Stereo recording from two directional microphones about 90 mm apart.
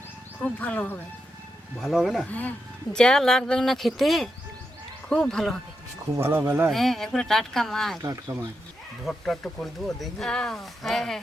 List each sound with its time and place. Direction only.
0.4 s speech: 15° left (ahead or behind)
1.8 s speech: centre (ahead or behind)
6.1 s speech: 25° right (ahead or behind)
6.7 s speech: centre (ahead or behind)
8.0 s speech: 35° right (ahead or behind)
9.0 s speech: centre (ahead or behind)